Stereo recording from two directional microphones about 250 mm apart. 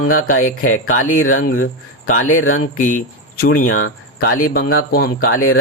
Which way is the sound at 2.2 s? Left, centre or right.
Left.